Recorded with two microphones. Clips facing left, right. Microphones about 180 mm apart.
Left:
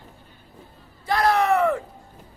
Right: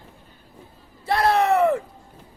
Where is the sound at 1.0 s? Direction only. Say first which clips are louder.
Right 1 dB; 25° right (ahead or behind).